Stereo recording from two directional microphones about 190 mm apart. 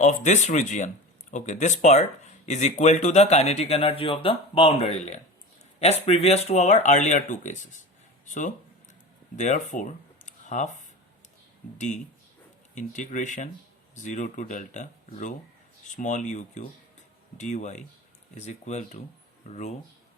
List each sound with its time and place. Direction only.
0.0 s speech: 40° left (ahead or behind)
10.2 s a sound: 40° left (ahead or behind)
12.7 s speech: 40° left (ahead or behind)